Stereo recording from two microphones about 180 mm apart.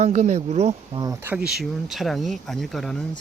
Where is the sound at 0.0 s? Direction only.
40° right (ahead or behind).